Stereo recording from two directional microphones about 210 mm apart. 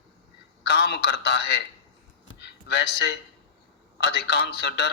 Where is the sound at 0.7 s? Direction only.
50° left (ahead or behind).